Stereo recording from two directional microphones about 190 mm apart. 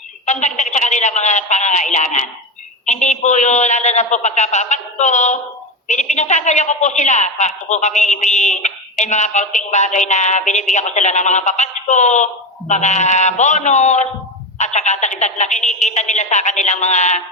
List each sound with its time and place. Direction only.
0.3 s a woman's voice: 40° left (ahead or behind)